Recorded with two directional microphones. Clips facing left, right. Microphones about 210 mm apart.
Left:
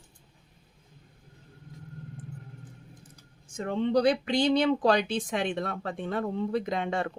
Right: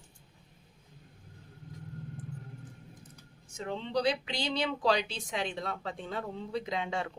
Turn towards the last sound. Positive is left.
turn(degrees=55)  # may be behind; listen again after turning